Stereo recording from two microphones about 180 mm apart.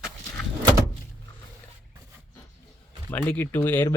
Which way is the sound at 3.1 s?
10° left (ahead or behind).